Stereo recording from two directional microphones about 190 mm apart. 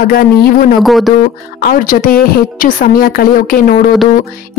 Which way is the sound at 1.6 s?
45° left (ahead or behind).